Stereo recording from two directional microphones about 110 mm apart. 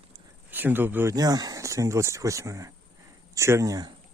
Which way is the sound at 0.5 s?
15° right (ahead or behind).